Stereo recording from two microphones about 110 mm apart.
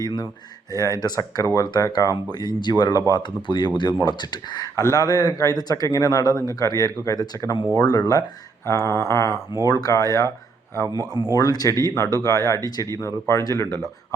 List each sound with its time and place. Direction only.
0.0 s speech: 40° left (ahead or behind)
8.6 s a sound: 25° left (ahead or behind)
9.6 s speech: 35° left (ahead or behind)
10.8 s speech: 35° right (ahead or behind)
11.3 s speech: 35° left (ahead or behind)
13.0 s a sound: 25° left (ahead or behind)